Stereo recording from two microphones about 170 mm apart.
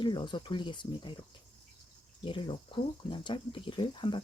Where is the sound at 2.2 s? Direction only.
30° left (ahead or behind).